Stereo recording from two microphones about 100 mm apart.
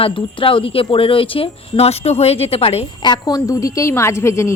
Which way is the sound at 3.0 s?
45° left (ahead or behind).